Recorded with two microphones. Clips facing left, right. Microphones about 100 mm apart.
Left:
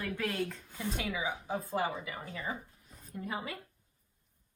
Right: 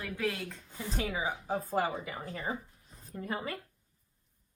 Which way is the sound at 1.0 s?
40° right (ahead or behind).